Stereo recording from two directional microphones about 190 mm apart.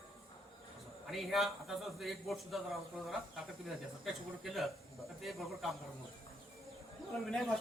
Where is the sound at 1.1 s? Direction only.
Centre (ahead or behind).